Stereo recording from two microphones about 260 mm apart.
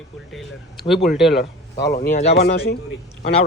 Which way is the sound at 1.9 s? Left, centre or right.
Left.